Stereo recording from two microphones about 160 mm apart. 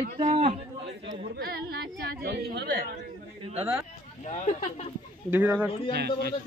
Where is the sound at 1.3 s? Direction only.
75° right (ahead or behind).